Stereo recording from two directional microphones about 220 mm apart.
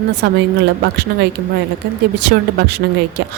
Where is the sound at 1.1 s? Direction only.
50° right (ahead or behind).